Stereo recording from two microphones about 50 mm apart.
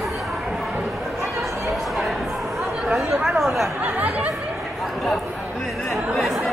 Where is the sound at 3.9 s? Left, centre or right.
Right.